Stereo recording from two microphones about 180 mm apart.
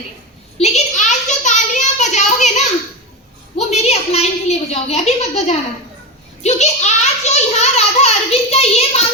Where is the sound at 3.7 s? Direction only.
35° left (ahead or behind).